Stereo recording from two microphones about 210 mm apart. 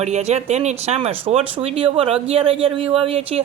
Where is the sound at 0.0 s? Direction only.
30° right (ahead or behind).